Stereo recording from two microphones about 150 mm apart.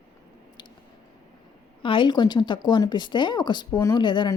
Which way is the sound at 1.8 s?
35° left (ahead or behind).